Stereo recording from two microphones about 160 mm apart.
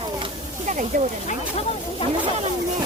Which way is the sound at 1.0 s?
55° right (ahead or behind).